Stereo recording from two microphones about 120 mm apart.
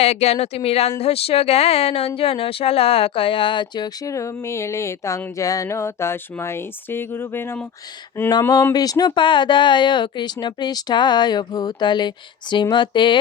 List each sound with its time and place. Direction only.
0.0 s speech: 60° left (ahead or behind); by 7.6 s 20° left (ahead or behind)
8.3 s speech: 35° left (ahead or behind)